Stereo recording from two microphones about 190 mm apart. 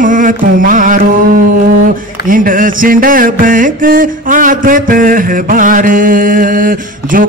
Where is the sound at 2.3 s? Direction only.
45° right (ahead or behind).